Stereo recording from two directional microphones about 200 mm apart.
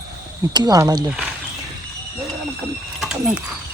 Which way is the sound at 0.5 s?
20° right (ahead or behind).